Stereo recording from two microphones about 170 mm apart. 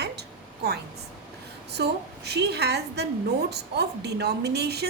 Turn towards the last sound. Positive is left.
turn(degrees=-75)  # may be behind; listen again after turning